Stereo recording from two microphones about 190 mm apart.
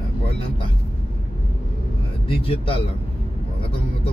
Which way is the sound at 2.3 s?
30° left (ahead or behind).